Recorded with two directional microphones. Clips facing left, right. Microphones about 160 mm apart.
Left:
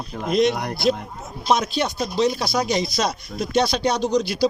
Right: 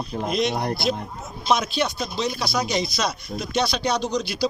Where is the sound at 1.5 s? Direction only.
45° left (ahead or behind).